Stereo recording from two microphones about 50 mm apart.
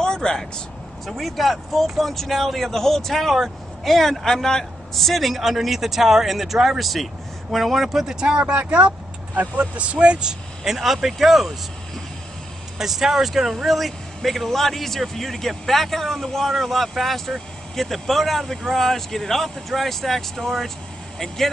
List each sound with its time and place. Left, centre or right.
0.0 s a sound: centre
1.0 s speech: centre
10.7 s speech: centre
12.7 s speech: centre